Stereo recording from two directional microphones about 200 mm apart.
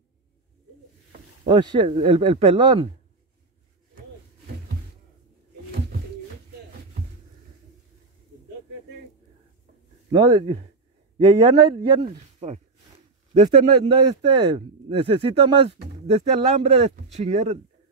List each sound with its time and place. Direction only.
1.5 s speech: 25° right (ahead or behind)
10.1 s speech: 25° right (ahead or behind)